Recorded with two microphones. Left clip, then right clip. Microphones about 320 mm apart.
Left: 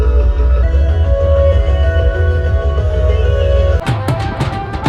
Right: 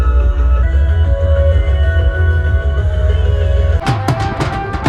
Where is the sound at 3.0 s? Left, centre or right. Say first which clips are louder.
Left 7 dB; left.